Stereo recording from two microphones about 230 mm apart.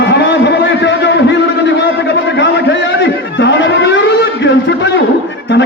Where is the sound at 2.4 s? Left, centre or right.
Left.